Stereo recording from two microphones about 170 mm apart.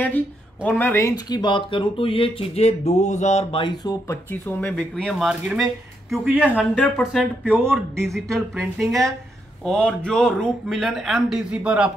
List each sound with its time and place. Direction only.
0.7 s speech: 10° left (ahead or behind); by 3.6 s 40° left (ahead or behind)
3.6 s speech: 20° left (ahead or behind); by 6.6 s 10° right (ahead or behind)
6.6 s speech: 10° left (ahead or behind)
7.0 s speech: 5° right (ahead or behind)
8.0 s speech: centre (ahead or behind)